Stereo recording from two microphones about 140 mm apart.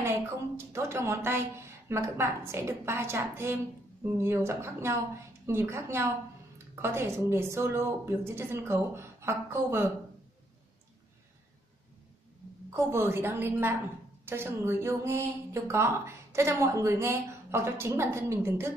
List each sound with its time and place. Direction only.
0.0 s a woman's voice: 20° right (ahead or behind)
12.7 s a woman's voice: 20° right (ahead or behind)